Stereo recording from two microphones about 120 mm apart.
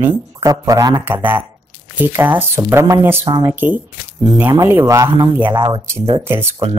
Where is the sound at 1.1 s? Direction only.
15° right (ahead or behind).